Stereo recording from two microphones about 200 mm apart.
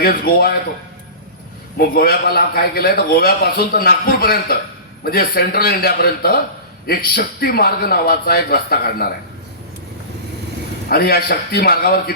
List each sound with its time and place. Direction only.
0.0 s a man's voice: 50° left (ahead or behind)
1.8 s a man's voice: 50° left (ahead or behind)
10.8 s a man's voice: 50° left (ahead or behind)